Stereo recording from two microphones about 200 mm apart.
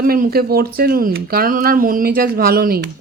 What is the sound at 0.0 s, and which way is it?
Speech, 45° right (ahead or behind).